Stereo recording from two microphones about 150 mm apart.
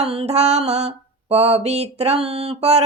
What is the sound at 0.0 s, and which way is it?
Female singing, 40° right (ahead or behind).